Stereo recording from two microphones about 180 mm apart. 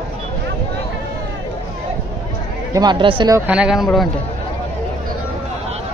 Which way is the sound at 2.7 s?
25° right (ahead or behind).